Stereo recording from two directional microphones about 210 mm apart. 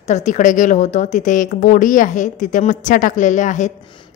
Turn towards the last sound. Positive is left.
turn(degrees=35)  # may be behind; listen again after turning